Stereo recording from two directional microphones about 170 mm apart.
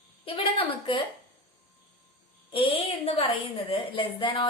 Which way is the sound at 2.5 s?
35° left (ahead or behind).